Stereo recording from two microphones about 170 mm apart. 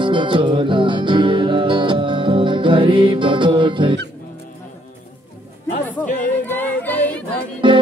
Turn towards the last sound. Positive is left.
turn(degrees=-30)  # may be behind; listen again after turning